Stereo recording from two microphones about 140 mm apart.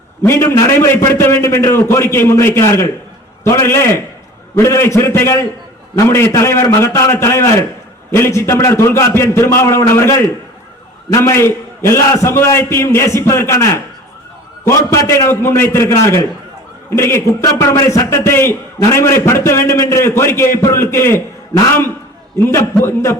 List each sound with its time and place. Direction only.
0.2 s a man's voice: 20° left (ahead or behind)